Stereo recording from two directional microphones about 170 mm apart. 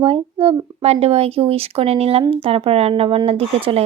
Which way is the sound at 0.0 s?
35° right (ahead or behind).